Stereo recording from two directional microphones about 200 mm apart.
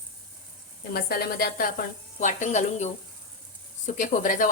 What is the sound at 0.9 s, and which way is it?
Speech, 50° left (ahead or behind).